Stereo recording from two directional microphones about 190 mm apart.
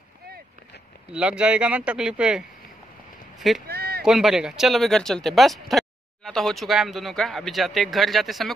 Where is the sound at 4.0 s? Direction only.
5° right (ahead or behind).